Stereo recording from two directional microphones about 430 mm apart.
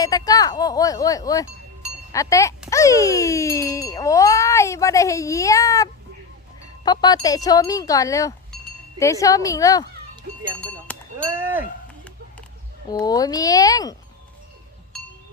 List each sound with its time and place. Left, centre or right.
0.0 s speech: centre
10.3 s music: centre
10.9 s sheep: centre
12.9 s speech: centre